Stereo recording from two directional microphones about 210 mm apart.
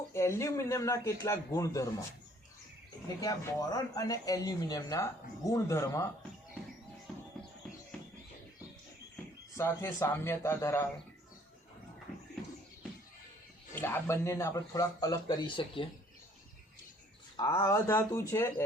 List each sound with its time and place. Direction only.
0.1 s speech: 15° left (ahead or behind)
3.2 s speech: 15° left (ahead or behind)
9.6 s speech: 10° left (ahead or behind)
13.7 s speech: 10° left (ahead or behind)
17.3 s speech: 15° left (ahead or behind)